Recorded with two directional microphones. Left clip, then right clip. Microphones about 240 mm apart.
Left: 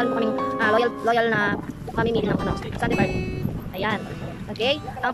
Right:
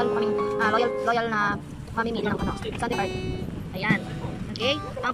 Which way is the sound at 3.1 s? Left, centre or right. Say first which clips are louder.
Left 3 dB; centre.